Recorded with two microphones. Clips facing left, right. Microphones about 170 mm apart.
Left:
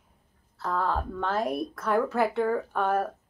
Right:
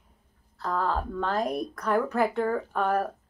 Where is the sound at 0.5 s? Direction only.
5° left (ahead or behind).